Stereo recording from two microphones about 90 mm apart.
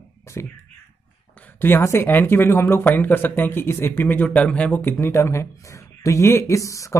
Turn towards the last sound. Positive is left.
turn(degrees=35)  # may be behind; listen again after turning